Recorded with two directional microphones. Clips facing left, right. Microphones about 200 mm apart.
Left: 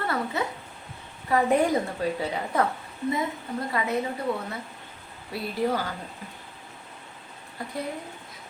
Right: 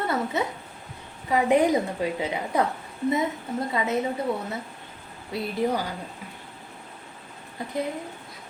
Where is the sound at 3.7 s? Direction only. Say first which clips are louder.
Right 1 dB; 20° right (ahead or behind).